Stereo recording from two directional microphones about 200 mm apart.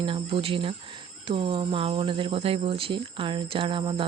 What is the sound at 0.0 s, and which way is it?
Speech, 25° right (ahead or behind).